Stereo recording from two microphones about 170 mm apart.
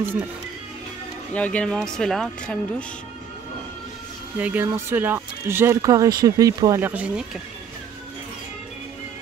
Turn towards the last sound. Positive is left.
turn(degrees=-10)  # may be behind; listen again after turning